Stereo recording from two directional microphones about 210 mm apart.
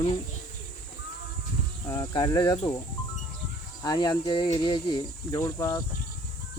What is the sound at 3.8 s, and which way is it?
Speech, 20° left (ahead or behind).